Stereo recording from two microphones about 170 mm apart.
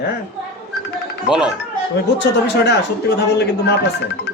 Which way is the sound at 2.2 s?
85° left.